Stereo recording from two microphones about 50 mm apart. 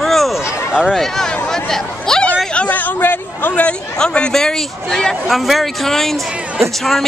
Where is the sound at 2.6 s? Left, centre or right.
Left.